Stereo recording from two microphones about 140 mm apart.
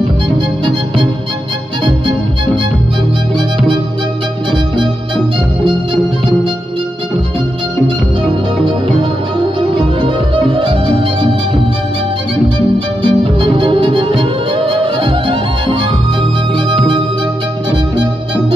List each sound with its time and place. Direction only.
1.9 s music: 35° right (ahead or behind)
4.5 s music: 35° right (ahead or behind)
9.4 s music: 35° right (ahead or behind)
13.0 s music: 35° right (ahead or behind)